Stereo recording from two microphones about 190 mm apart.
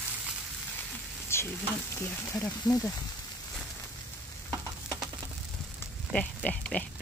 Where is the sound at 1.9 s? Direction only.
15° left (ahead or behind).